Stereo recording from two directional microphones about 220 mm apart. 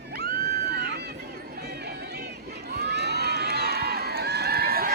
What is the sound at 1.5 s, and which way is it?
Crowd, 45° right (ahead or behind).